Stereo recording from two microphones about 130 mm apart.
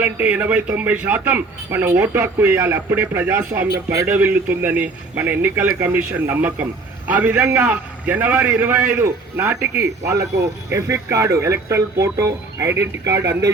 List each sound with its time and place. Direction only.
0.0 s a man's voice: 15° right (ahead or behind)
10.7 s speech: 25° right (ahead or behind)